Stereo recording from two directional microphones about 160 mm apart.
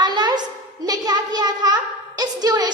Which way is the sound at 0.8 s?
25° right (ahead or behind).